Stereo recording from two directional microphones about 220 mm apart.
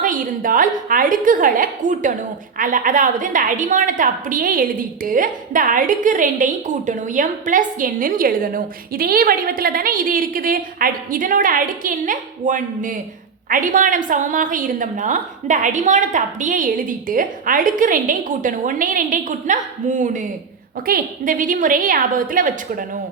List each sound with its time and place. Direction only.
0.0 s a woman's voice: 40° right (ahead or behind)